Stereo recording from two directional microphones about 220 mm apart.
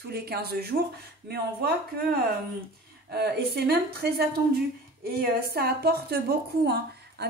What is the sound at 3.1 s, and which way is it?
A woman's voice, 45° right (ahead or behind).